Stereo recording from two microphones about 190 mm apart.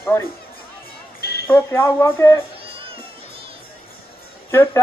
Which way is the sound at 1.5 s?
15° left (ahead or behind).